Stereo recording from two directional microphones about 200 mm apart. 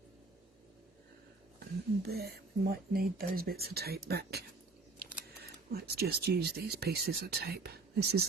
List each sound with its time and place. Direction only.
1.5 s speech: 50° right (ahead or behind)